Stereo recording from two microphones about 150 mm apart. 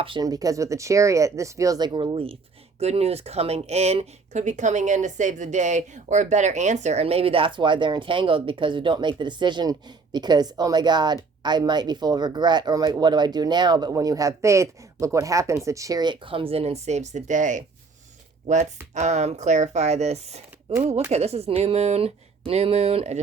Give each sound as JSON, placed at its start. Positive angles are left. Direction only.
{"t": 0.0, "sound": "speech", "side_deg": -30}